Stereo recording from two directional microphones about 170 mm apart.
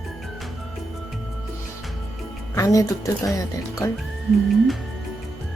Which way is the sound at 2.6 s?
20° left (ahead or behind).